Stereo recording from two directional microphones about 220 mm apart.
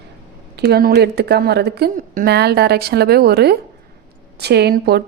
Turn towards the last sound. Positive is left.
turn(degrees=-45)  # may be behind; listen again after turning